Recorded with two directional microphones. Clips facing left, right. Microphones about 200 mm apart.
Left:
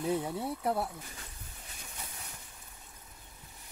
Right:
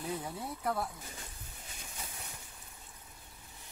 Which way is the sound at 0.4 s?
30° left (ahead or behind).